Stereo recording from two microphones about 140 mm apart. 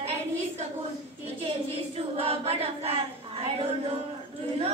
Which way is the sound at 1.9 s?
45° right (ahead or behind).